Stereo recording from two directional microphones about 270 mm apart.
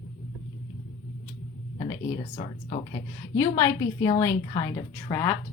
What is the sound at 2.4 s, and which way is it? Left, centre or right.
Speech, left.